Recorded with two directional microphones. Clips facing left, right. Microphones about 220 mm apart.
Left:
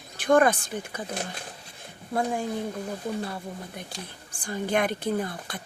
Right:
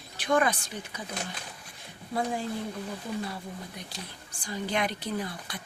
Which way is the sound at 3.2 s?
50° left (ahead or behind).